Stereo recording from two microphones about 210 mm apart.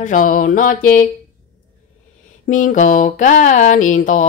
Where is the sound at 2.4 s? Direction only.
35° left (ahead or behind).